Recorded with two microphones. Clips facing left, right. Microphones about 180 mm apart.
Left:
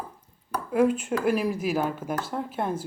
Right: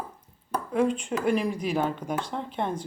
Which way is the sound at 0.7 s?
5° left (ahead or behind).